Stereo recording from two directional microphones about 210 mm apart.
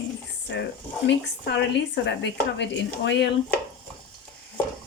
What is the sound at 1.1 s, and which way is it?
Speech, 55° left (ahead or behind).